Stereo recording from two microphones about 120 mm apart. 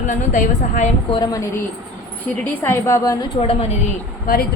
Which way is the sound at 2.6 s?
25° left (ahead or behind).